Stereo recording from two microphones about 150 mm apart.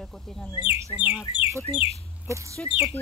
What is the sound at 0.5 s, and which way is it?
Speech, 35° left (ahead or behind).